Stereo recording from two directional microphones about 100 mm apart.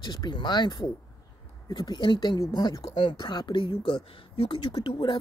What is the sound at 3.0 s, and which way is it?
Speech, 50° left (ahead or behind).